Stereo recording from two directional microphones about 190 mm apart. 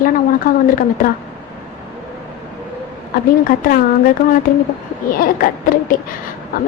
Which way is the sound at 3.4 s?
50° left (ahead or behind).